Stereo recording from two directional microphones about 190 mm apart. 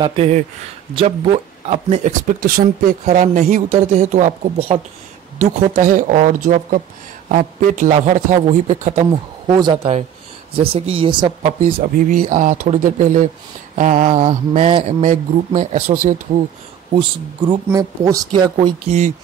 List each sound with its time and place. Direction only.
0.0 s speech: 30° right (ahead or behind)
1.7 s speech: 35° right (ahead or behind)
2.4 s speech: 50° right (ahead or behind); by 4.7 s 30° right (ahead or behind)
5.4 s speech: 45° right (ahead or behind)
9.1 s speech: 25° right (ahead or behind)
11.8 s speech: 45° right (ahead or behind)
14.9 s speech: 40° right (ahead or behind)
16.9 s speech: 25° right (ahead or behind)
18.9 s speech: 40° right (ahead or behind)